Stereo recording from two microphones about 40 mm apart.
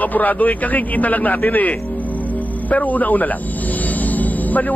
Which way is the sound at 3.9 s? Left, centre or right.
Left.